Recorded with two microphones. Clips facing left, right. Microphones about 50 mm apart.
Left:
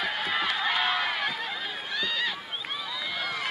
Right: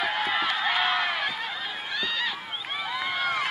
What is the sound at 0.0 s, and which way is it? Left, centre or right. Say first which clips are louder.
Run: right 2 dB; centre.